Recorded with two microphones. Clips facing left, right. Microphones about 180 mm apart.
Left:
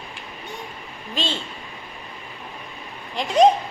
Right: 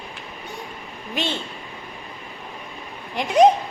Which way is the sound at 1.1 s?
15° right (ahead or behind).